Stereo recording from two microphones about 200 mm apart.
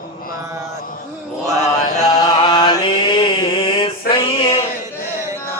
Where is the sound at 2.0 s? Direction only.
20° left (ahead or behind).